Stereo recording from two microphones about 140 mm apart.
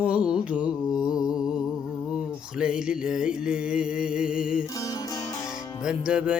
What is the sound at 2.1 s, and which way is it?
Music, 5° right (ahead or behind).